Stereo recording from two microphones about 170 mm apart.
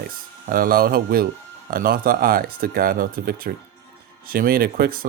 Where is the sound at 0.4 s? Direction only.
55° right (ahead or behind).